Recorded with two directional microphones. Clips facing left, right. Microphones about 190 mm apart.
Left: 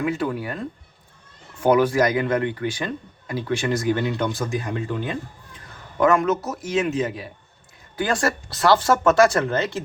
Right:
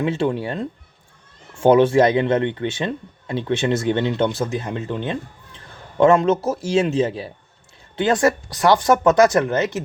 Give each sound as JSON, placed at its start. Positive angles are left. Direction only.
{"t": 0.0, "sound": "speech", "side_deg": -25}